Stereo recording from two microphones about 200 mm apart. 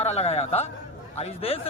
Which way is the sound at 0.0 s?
30° left (ahead or behind).